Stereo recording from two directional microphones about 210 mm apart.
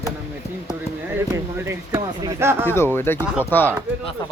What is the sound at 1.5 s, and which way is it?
Speech, 10° right (ahead or behind).